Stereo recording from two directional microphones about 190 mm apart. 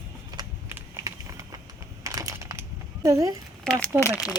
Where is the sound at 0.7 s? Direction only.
15° right (ahead or behind).